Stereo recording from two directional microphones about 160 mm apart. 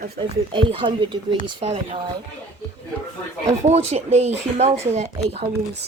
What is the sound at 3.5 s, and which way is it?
Speech, 45° right (ahead or behind).